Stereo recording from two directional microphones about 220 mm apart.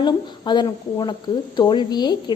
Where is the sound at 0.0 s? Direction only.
20° left (ahead or behind).